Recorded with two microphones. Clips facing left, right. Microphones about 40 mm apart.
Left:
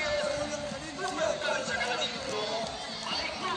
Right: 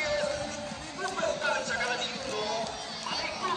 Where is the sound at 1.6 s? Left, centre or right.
Left.